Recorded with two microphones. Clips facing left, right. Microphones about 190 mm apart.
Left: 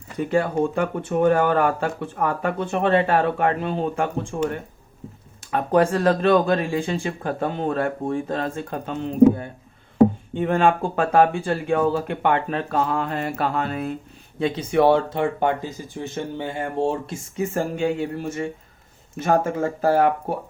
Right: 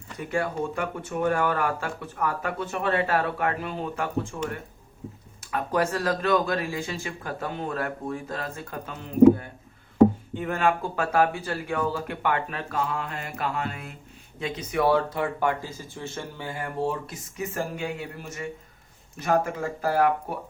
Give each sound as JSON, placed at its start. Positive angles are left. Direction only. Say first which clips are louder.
{"t": 0.2, "sound": "speech", "louder": "left 7 dB", "side_deg": 30}
{"t": 5.4, "sound": "speech", "louder": "left 7 dB", "side_deg": 30}
{"t": 10.3, "sound": "speech", "louder": "left 6 dB", "side_deg": 30}